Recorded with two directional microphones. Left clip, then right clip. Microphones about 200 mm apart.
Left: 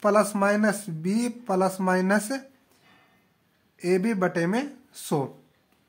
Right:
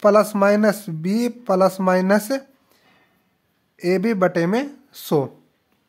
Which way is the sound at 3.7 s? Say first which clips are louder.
Right 5 dB; 40° right (ahead or behind).